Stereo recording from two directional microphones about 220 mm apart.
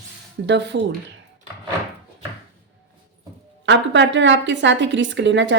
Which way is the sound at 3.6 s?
55° right (ahead or behind).